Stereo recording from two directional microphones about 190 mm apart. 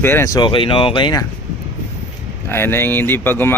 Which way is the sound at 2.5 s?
10° left (ahead or behind).